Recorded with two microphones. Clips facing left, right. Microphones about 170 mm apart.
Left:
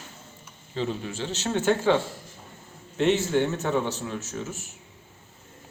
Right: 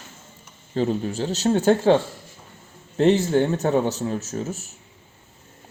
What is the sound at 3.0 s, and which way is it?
Speech, 35° right (ahead or behind).